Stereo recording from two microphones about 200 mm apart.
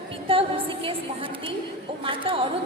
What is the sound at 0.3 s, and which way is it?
A woman's voice, 25° right (ahead or behind).